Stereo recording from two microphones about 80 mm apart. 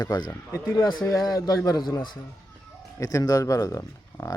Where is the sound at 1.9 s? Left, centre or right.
Left.